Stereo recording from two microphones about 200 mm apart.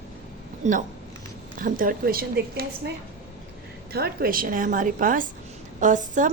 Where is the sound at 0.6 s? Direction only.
40° right (ahead or behind).